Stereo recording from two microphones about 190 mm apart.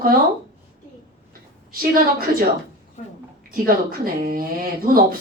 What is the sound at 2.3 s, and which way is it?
Speech, 50° right (ahead or behind).